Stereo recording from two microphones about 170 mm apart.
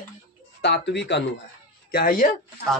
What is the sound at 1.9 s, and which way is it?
Speech, 60° left (ahead or behind).